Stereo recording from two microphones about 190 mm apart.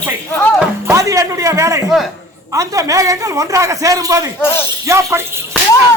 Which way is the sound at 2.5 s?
15° right (ahead or behind).